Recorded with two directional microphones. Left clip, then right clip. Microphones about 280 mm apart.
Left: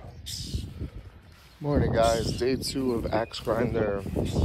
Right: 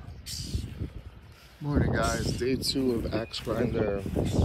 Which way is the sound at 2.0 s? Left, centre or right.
Left.